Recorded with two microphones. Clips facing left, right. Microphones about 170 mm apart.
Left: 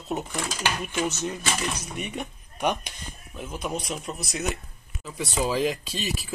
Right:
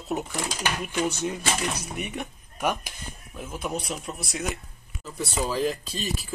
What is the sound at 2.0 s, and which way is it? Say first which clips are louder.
Speech: even; centre (ahead or behind).